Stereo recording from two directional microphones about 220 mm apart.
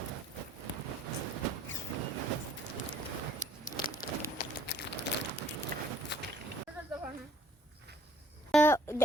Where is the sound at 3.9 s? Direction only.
45° left (ahead or behind).